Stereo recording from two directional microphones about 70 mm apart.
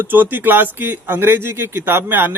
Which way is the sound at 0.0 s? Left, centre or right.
Right.